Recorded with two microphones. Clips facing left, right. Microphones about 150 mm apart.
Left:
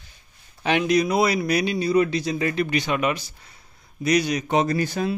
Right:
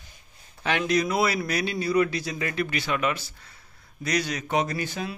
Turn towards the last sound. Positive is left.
turn(degrees=40)  # may be behind; listen again after turning